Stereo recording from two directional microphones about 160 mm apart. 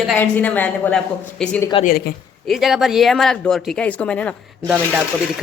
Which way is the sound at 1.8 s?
70° left (ahead or behind).